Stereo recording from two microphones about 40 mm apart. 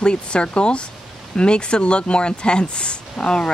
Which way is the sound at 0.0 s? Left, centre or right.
Left.